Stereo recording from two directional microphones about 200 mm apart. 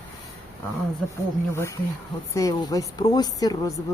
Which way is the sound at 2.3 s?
15° left (ahead or behind).